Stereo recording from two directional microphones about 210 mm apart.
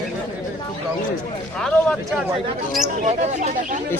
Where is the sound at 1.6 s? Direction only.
5° left (ahead or behind).